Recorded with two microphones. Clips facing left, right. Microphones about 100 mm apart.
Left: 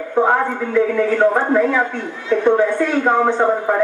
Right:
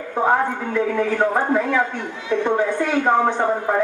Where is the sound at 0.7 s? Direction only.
15° right (ahead or behind).